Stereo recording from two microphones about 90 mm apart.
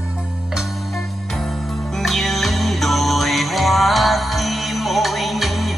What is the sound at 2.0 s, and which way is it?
Music, centre (ahead or behind).